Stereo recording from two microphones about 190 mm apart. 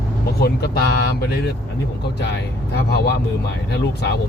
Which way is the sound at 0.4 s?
60° left (ahead or behind).